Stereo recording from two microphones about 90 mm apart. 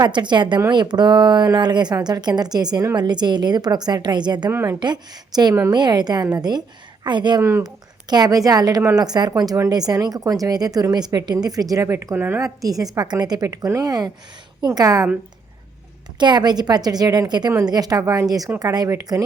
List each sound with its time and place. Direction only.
0.1 s speech: 55° right (ahead or behind)
4.4 s a woman's voice: 30° right (ahead or behind)
4.8 s speech: 50° right (ahead or behind)
8.1 s speech: 45° right (ahead or behind); by 12.4 s 20° right (ahead or behind)
12.4 s speech: 40° right (ahead or behind)
16.1 s speech: 55° right (ahead or behind)